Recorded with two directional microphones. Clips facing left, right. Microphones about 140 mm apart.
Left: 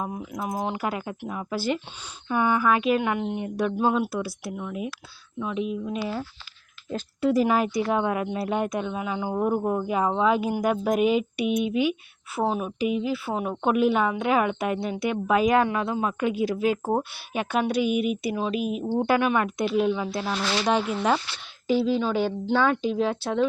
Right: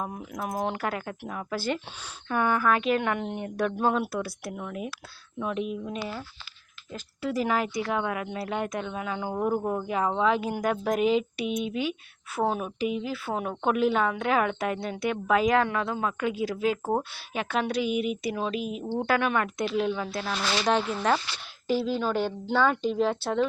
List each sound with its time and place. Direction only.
0.0 s speech: 5° left (ahead or behind)
7.2 s speech: 20° left (ahead or behind); by 23.5 s centre (ahead or behind)